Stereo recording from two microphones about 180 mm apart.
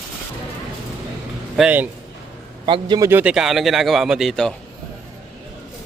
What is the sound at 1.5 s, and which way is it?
Speech, 5° right (ahead or behind).